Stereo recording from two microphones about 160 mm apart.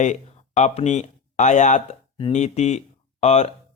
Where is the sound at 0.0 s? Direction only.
50° left (ahead or behind).